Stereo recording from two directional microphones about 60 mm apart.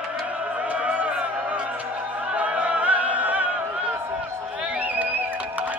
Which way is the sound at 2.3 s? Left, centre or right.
Right.